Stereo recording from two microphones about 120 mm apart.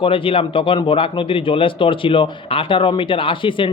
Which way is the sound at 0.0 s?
45° left (ahead or behind).